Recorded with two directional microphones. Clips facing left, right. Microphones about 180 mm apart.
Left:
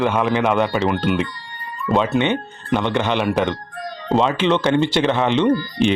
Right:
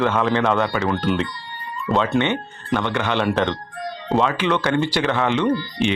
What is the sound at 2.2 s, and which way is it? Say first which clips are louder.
Speech: left 1 dB; 15° left (ahead or behind).